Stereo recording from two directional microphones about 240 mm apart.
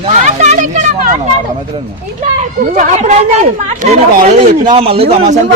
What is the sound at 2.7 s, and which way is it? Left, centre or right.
Speech, right.